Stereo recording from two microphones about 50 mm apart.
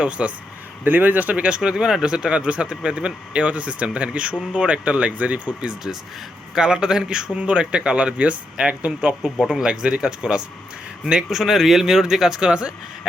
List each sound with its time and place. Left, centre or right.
0.0 s speech: right
0.9 s speech: right
6.5 s speech: centre